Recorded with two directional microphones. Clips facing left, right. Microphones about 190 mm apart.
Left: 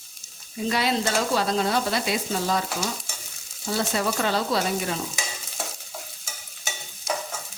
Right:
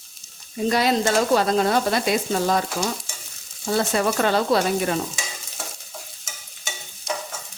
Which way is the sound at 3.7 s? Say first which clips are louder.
Right 4 dB; 55° right (ahead or behind).